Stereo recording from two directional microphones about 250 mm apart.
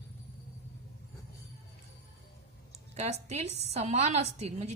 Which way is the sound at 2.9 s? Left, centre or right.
Right.